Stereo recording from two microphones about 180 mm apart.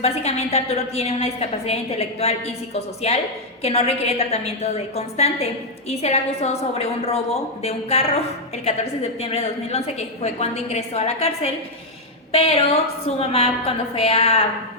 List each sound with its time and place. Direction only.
0.0 s a woman's voice: 35° left (ahead or behind)